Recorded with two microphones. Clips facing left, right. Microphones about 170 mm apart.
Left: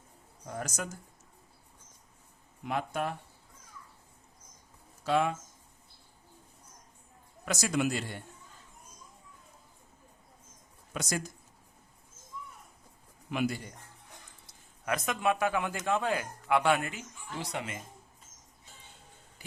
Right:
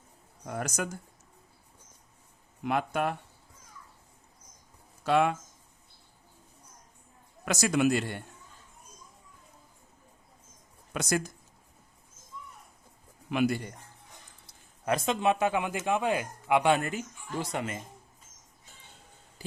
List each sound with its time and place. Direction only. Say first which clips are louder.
0.4 s speech: right 4 dB; 70° right (ahead or behind)
2.6 s speech: right 4 dB; 65° right (ahead or behind)
5.0 s speech: right 3 dB; 70° right (ahead or behind)
7.4 s speech: right 4 dB; 70° right (ahead or behind)
10.9 s speech: right 3 dB; 65° right (ahead or behind)
13.3 s speech: right 4 dB; 65° right (ahead or behind)
14.8 s speech: right 3 dB; 30° right (ahead or behind)
17.4 s speech: right 3 dB; 45° right (ahead or behind)
19.4 s a sound: right 9 dB; 35° right (ahead or behind)